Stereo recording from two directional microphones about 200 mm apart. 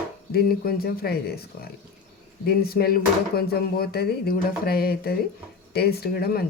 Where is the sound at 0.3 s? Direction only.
50° left (ahead or behind).